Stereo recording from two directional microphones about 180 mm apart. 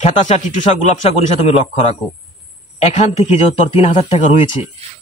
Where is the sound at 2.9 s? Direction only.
35° left (ahead or behind).